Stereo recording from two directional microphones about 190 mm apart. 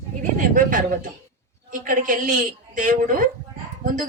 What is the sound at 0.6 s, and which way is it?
A woman's voice, 45° right (ahead or behind).